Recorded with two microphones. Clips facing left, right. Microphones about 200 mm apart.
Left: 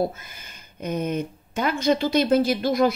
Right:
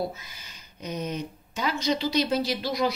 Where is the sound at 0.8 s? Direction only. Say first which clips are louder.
Left 6 dB; 55° left (ahead or behind).